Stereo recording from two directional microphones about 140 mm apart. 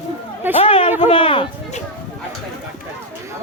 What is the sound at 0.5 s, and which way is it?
Speech, 45° left (ahead or behind).